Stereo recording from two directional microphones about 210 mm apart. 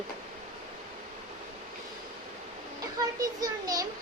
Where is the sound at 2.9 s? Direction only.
15° right (ahead or behind).